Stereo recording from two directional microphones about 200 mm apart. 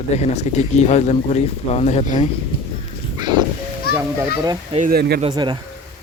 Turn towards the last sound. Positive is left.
turn(degrees=-20)  # may be behind; listen again after turning